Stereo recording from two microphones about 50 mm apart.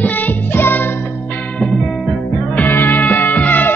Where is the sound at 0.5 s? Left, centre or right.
Left.